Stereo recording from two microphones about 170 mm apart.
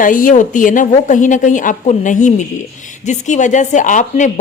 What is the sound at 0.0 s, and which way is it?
A woman's voice, 50° left (ahead or behind).